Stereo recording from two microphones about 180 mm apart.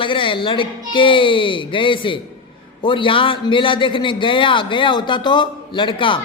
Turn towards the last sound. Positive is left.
turn(degrees=25)  # may be behind; listen again after turning